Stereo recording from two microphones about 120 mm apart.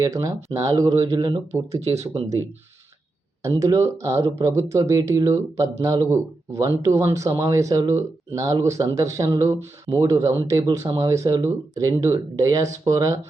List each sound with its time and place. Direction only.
0.0 s speech: 30° right (ahead or behind)
1.1 s speech: 40° right (ahead or behind)
1.8 s speech: 60° right (ahead or behind)
3.6 s speech: 25° right (ahead or behind)